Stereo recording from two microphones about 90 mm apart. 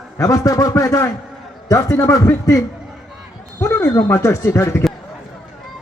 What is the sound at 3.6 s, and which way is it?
A man's voice, 35° left (ahead or behind).